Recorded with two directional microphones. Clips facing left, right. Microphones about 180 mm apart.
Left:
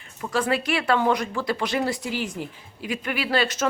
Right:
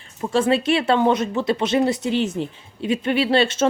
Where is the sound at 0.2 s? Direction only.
25° right (ahead or behind).